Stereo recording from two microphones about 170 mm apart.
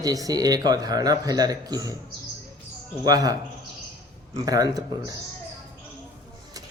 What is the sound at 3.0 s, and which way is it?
Speech, 20° right (ahead or behind).